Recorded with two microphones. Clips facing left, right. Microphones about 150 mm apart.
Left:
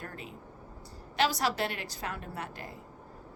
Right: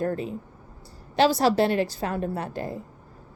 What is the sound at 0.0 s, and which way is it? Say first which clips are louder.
A woman's voice: right 16 dB; 35° right (ahead or behind).